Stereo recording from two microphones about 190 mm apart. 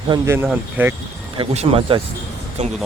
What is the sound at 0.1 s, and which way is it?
Speech, 15° right (ahead or behind).